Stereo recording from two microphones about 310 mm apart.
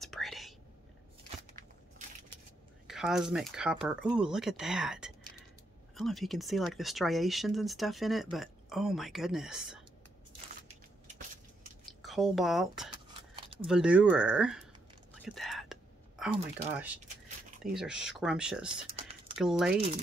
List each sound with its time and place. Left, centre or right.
0.0 s whispering: centre
2.9 s speech: centre
12.0 s speech: centre
13.4 s a sound: centre
13.7 s speech: centre
15.2 s whispering: centre
16.7 s speech: centre